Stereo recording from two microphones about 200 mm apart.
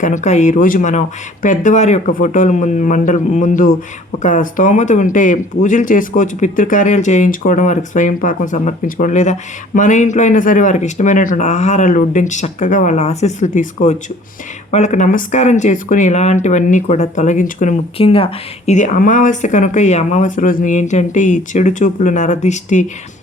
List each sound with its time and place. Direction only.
0.0 s speech: 40° left (ahead or behind)